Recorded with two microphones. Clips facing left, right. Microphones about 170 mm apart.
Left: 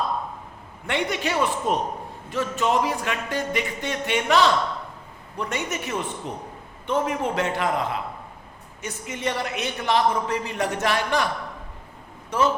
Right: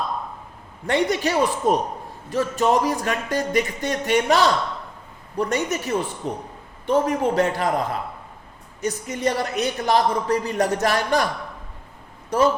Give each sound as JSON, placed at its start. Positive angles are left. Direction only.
{"t": 0.9, "sound": "a man's voice", "side_deg": -40}
{"t": 12.3, "sound": "a man's voice", "side_deg": -40}